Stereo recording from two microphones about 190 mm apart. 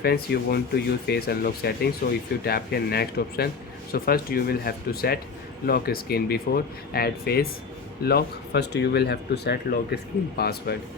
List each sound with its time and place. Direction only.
0.0 s speech: 55° left (ahead or behind)